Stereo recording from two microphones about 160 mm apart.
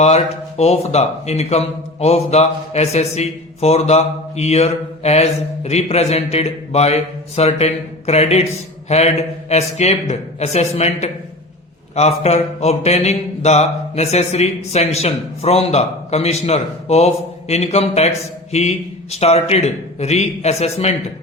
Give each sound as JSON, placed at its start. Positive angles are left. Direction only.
{"t": 0.0, "sound": "speech", "side_deg": 40}